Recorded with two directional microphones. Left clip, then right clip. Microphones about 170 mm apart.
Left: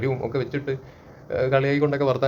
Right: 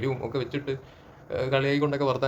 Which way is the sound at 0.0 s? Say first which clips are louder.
Left 4 dB; 10° right (ahead or behind).